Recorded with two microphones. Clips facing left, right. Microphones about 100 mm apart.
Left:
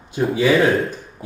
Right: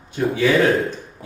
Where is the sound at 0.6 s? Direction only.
Centre (ahead or behind).